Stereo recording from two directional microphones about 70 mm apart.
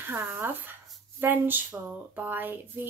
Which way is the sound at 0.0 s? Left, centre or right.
Right.